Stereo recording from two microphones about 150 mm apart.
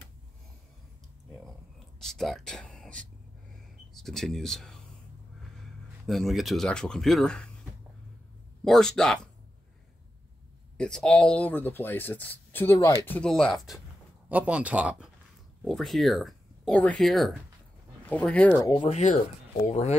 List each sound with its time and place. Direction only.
2.0 s speech: centre (ahead or behind)
6.0 s speech: centre (ahead or behind)
8.6 s speech: 5° left (ahead or behind)
10.8 s speech: 5° left (ahead or behind)
13.3 s speech: centre (ahead or behind)
14.3 s speech: 10° right (ahead or behind)
15.6 s speech: centre (ahead or behind)
18.6 s speech: 30° left (ahead or behind)
18.9 s speech: 50° left (ahead or behind)